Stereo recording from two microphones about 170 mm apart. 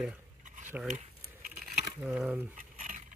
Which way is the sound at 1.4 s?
60° right (ahead or behind).